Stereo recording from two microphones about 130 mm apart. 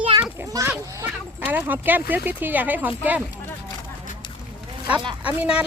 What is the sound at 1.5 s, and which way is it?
Speech, 15° right (ahead or behind).